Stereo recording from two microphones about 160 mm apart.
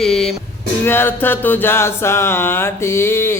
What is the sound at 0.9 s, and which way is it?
Music, 15° left (ahead or behind).